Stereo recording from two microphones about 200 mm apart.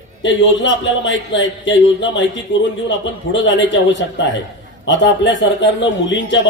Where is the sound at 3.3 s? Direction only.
60° left (ahead or behind).